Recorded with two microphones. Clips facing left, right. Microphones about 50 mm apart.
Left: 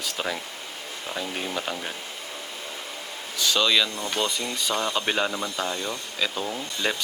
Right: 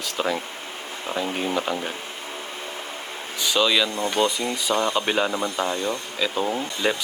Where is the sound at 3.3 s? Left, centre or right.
Centre.